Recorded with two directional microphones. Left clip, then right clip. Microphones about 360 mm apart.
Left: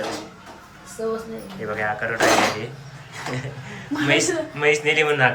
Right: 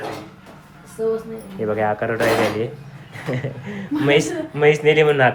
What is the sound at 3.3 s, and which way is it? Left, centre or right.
Speech, centre.